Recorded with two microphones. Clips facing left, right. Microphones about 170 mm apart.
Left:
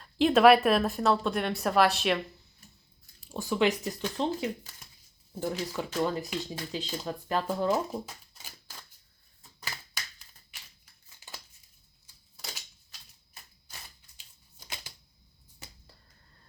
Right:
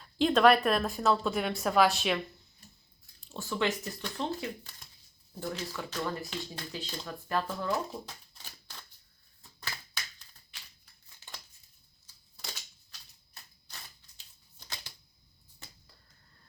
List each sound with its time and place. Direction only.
0.0 s a woman's voice: 5° left (ahead or behind)
3.2 s speech: 10° left (ahead or behind)
8.0 s a sound: 5° left (ahead or behind)
9.6 s typewriter: 5° left (ahead or behind)
12.9 s typewriter: 10° left (ahead or behind)